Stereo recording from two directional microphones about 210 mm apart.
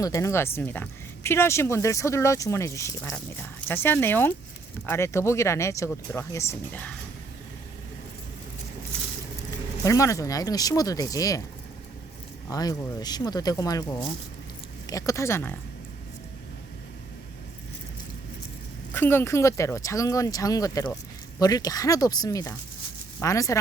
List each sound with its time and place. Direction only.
0.0 s speech: 15° left (ahead or behind)
9.8 s speech: 15° left (ahead or behind)
12.5 s speech: 15° left (ahead or behind)
18.9 s speech: 10° left (ahead or behind)